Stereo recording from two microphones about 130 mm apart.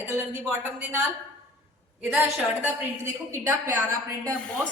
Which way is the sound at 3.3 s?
15° right (ahead or behind).